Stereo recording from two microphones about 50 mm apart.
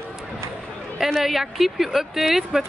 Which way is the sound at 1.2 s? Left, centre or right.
Centre.